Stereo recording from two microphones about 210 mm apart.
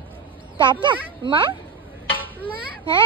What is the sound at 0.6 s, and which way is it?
Speech, 20° right (ahead or behind).